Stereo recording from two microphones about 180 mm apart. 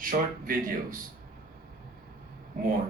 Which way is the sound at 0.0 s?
50° right (ahead or behind).